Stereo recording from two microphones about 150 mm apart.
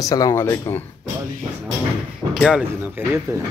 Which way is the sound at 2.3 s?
Centre (ahead or behind).